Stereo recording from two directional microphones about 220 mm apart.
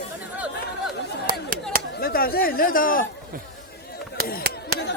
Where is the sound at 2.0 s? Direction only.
45° left (ahead or behind).